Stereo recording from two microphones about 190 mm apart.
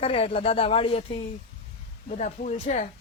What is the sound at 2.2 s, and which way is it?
Speech, 35° left (ahead or behind).